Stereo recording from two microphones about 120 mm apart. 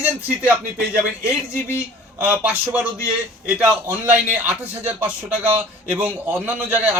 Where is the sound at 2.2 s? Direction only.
10° right (ahead or behind).